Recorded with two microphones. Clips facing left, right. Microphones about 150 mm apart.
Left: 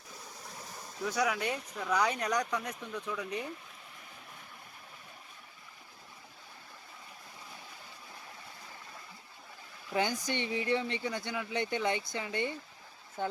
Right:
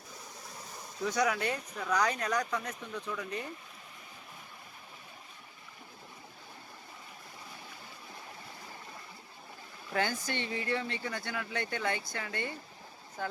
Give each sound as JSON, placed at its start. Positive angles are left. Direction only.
{"t": 1.0, "sound": "speech", "side_deg": 5}
{"t": 9.9, "sound": "speech", "side_deg": 15}